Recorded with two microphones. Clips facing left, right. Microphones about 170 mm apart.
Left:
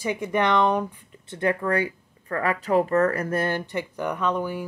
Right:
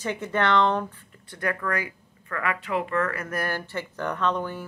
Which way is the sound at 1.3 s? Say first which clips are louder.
Left 5 dB; 25° left (ahead or behind).